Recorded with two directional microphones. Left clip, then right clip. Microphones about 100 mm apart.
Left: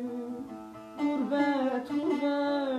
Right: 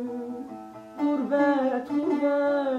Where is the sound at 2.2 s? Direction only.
35° right (ahead or behind).